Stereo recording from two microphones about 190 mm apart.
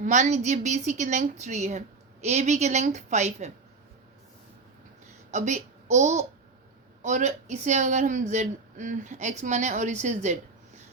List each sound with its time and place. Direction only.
0.0 s a woman's voice: 40° right (ahead or behind)
5.3 s a woman's voice: 40° right (ahead or behind)